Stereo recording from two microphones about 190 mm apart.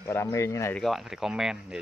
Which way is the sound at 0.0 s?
15° left (ahead or behind).